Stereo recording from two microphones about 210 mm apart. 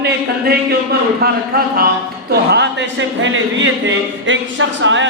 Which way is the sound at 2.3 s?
55° right (ahead or behind).